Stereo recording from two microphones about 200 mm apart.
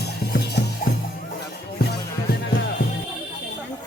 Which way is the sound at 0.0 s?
55° left (ahead or behind).